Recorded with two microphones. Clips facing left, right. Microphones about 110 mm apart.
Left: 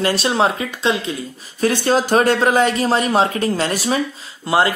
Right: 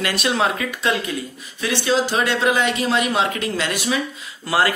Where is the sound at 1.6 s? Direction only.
45° left (ahead or behind).